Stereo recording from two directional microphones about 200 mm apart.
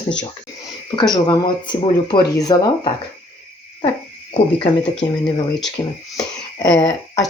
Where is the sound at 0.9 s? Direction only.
25° left (ahead or behind).